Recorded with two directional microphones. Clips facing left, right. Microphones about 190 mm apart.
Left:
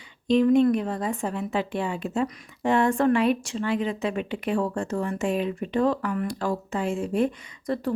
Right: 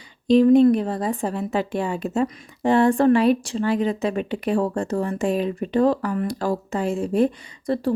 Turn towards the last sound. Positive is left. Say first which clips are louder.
# right 4 dB
turn(degrees=-30)  # may be behind; listen again after turning